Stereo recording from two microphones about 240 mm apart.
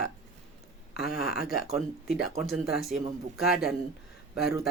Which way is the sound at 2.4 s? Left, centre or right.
Centre.